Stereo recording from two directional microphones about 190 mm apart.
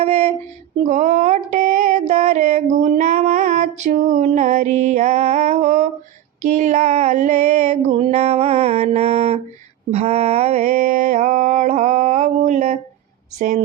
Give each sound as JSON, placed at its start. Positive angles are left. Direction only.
{"t": 0.0, "sound": "mantra", "side_deg": -30}
{"t": 0.9, "sound": "a sound", "side_deg": -40}
{"t": 6.4, "sound": "mantra", "side_deg": -40}